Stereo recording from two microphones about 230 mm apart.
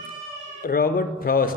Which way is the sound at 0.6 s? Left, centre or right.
Left.